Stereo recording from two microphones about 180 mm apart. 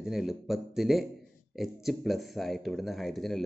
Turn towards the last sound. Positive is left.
turn(degrees=0)  # may be behind; listen again after turning